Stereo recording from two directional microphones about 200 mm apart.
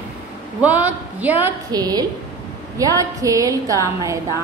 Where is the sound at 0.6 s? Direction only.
10° right (ahead or behind).